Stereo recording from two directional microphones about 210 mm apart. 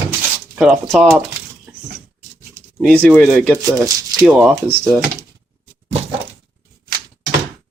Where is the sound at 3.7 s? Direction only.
15° right (ahead or behind).